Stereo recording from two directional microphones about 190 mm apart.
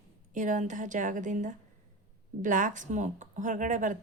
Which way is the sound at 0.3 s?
40° right (ahead or behind).